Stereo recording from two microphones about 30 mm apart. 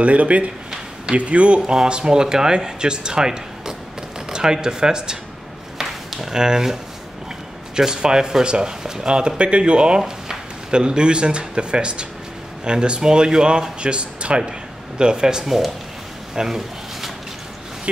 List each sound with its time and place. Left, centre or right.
0.0 s speech: right
1.7 s speech: right
5.8 s a sound: centre
7.7 s speech: right
9.9 s speech: right
15.4 s speech: centre
16.4 s a sound: centre